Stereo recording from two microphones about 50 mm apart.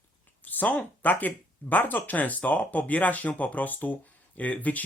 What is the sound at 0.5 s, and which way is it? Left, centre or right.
Speech, left.